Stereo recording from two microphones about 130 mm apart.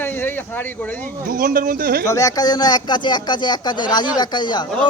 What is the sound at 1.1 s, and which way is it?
Speech, 90° right.